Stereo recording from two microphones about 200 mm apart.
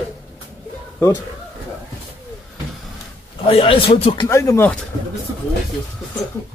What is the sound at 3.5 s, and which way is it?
Speech, 25° left (ahead or behind).